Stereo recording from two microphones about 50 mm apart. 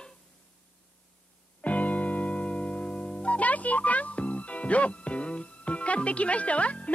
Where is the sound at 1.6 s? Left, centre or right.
Left.